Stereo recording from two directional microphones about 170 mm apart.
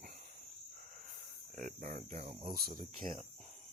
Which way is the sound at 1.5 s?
50° right (ahead or behind).